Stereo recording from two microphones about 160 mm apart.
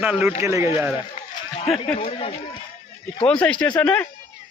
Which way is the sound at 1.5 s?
40° left (ahead or behind).